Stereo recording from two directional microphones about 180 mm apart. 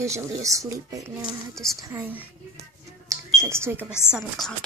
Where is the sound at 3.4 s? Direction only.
15° right (ahead or behind).